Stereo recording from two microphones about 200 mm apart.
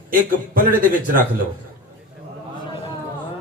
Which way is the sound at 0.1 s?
45° right (ahead or behind).